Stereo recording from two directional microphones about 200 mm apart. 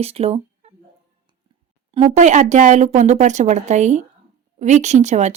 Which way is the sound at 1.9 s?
30° right (ahead or behind).